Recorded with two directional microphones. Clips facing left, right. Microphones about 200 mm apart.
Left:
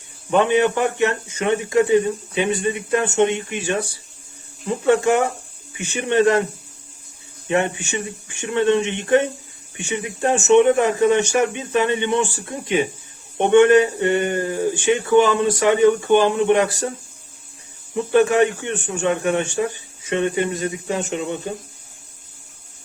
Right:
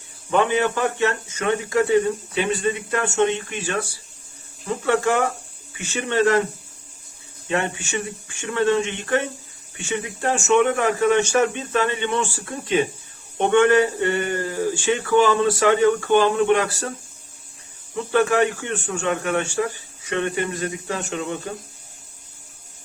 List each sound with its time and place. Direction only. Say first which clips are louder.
0.3 s speech: left 3 dB; 20° left (ahead or behind)
4.9 s speech: left 4 dB; 20° left (ahead or behind)
7.4 s speech: left 4 dB; 20° left (ahead or behind)
17.9 s speech: left 3 dB; 20° left (ahead or behind)